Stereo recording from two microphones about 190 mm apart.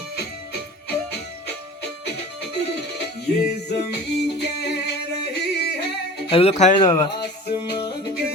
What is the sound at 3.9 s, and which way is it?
Music, 60° left (ahead or behind).